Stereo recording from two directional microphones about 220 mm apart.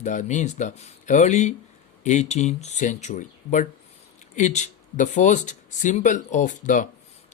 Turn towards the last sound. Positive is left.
turn(degrees=35)  # may be behind; listen again after turning